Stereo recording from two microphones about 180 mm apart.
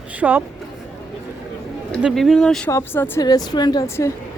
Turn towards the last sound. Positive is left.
turn(degrees=15)  # may be behind; listen again after turning